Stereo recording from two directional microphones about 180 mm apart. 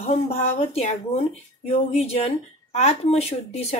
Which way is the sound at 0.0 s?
35° left (ahead or behind).